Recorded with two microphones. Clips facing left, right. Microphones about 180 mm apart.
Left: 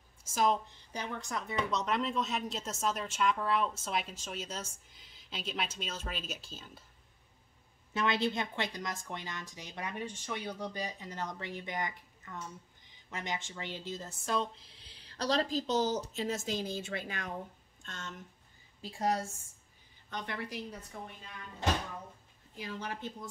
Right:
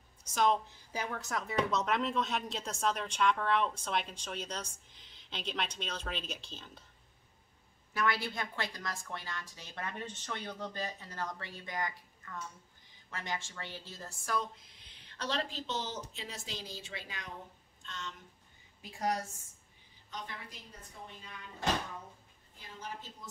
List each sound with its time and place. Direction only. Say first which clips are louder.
0.3 s a woman's voice: even; 5° left (ahead or behind)
7.9 s a woman's voice: left 3 dB; 20° left (ahead or behind); by 18.1 s 50° left (ahead or behind)
18.8 s a woman's voice: left 2 dB; 30° left (ahead or behind)
20.1 s a woman's voice: left 6 dB; 70° left (ahead or behind)
22.6 s a woman's voice: left 6 dB; 80° left